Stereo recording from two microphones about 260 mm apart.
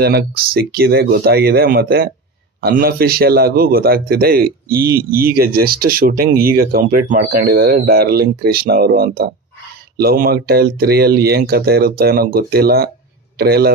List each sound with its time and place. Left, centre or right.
0.0 s a man's voice: right